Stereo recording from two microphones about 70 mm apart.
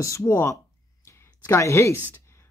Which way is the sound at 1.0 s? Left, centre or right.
Left.